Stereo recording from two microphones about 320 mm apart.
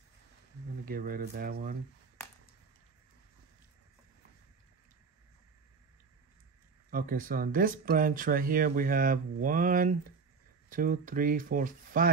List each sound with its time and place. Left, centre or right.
0.8 s speech: right
6.9 s speech: right